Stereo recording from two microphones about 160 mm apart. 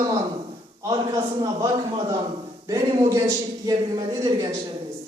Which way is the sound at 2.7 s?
25° right (ahead or behind).